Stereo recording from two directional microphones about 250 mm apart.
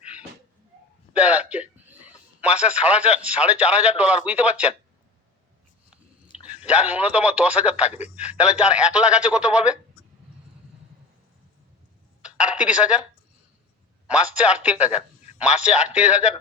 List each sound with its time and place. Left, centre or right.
1.3 s a sound: centre
2.4 s a man's voice: centre
6.7 s a man's voice: centre
7.9 s speech: left
8.4 s a man's voice: centre
12.2 s a sound: centre
14.4 s a man's voice: centre